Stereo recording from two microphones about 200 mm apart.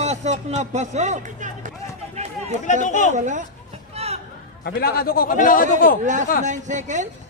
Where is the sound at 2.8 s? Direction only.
40° left (ahead or behind).